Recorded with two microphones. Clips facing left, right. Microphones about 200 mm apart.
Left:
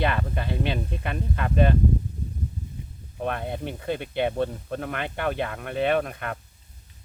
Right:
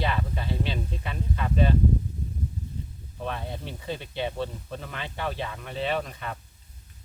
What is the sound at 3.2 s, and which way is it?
Speech, 55° left (ahead or behind).